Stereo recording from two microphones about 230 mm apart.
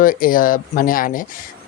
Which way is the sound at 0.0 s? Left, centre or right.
Left.